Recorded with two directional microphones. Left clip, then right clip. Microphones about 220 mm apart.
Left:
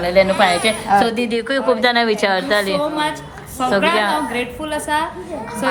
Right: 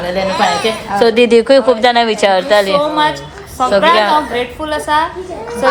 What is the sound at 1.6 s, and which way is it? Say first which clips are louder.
A woman's voice: right 5 dB; 5° right (ahead or behind).